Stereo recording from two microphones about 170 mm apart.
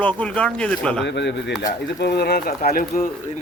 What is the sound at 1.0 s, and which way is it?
Speech, 90° left.